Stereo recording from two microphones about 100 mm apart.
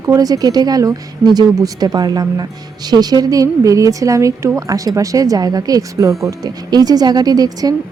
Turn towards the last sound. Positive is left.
turn(degrees=-40)  # may be behind; listen again after turning